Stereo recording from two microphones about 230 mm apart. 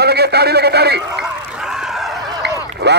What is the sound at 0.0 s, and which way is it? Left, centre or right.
A man's voice, right.